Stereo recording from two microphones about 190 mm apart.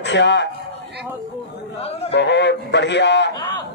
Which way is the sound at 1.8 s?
30° left (ahead or behind).